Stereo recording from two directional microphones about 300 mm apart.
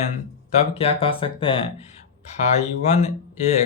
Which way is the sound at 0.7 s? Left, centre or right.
Centre.